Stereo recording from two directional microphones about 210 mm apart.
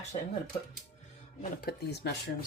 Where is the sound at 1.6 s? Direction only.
50° left (ahead or behind).